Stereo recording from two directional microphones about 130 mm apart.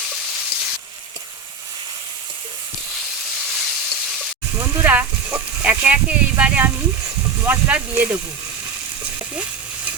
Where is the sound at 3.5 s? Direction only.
Centre (ahead or behind).